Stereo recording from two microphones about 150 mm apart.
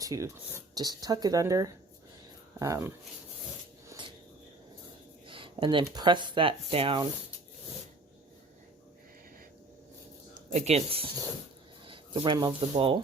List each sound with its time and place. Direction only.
0.0 s speech: 20° right (ahead or behind)
5.2 s a sound: 35° right (ahead or behind)
5.8 s speech: 30° right (ahead or behind)
10.5 s speech: 45° right (ahead or behind)